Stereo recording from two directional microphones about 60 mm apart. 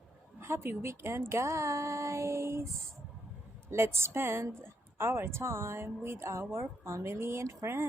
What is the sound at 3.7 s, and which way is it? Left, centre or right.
Speech, right.